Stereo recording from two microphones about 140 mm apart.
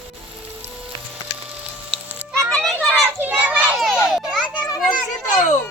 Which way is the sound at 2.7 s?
10° right (ahead or behind).